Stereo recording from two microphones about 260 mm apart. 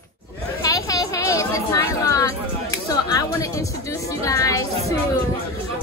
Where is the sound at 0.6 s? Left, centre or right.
Centre.